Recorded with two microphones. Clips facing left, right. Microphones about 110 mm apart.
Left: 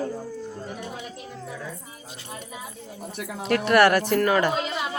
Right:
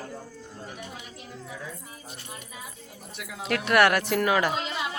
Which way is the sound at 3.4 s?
Centre (ahead or behind).